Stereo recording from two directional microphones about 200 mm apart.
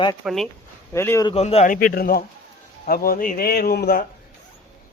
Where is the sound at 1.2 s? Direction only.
30° left (ahead or behind).